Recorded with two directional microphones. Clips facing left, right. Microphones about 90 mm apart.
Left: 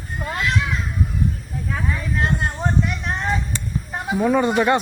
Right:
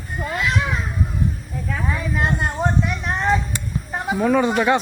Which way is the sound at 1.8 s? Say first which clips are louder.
Right 1 dB; 5° right (ahead or behind).